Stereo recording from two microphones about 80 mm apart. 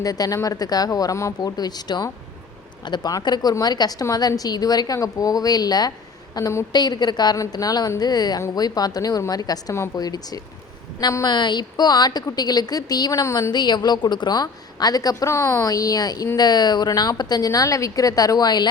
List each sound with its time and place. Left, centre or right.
0.0 s a woman's voice: left
1.4 s a woman's voice: left
11.3 s a woman's voice: left
15.3 s a woman's voice: left
15.6 s a woman's voice: left